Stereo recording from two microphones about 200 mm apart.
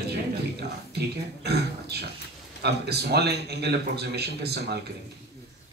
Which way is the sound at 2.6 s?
55° right (ahead or behind).